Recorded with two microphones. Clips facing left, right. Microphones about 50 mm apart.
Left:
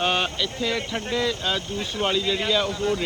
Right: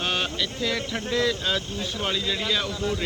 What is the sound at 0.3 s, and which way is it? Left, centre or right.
Speech, centre.